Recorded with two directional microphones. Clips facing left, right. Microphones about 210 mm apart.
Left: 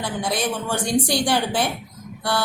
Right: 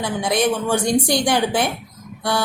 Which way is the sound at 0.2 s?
15° right (ahead or behind).